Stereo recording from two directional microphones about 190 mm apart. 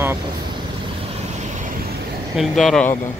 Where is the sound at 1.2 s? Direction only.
40° right (ahead or behind).